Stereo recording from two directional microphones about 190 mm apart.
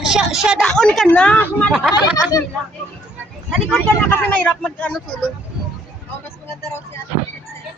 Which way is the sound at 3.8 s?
10° left (ahead or behind).